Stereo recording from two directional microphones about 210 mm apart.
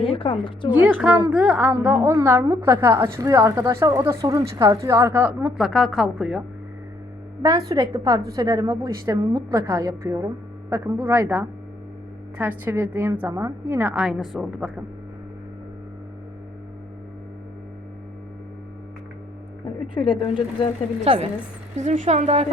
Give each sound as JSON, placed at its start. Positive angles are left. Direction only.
{"t": 0.1, "sound": "speech", "side_deg": 25}
{"t": 0.7, "sound": "a woman's voice", "side_deg": -5}
{"t": 7.4, "sound": "a woman's voice", "side_deg": -15}
{"t": 19.9, "sound": "speech", "side_deg": 25}
{"t": 21.0, "sound": "a woman's voice", "side_deg": -30}